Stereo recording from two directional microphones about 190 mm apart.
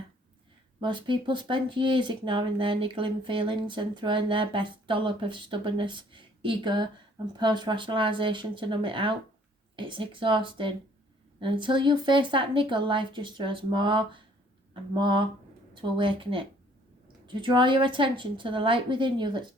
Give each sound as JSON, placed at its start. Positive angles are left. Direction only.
{"t": 0.8, "sound": "speech", "side_deg": -25}